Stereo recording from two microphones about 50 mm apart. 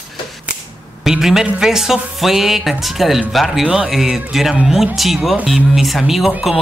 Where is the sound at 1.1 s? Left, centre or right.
Centre.